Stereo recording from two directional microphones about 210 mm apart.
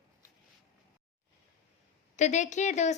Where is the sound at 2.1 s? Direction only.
35° left (ahead or behind).